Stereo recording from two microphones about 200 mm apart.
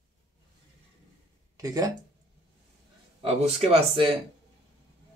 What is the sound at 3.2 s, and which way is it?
Speech, 30° right (ahead or behind).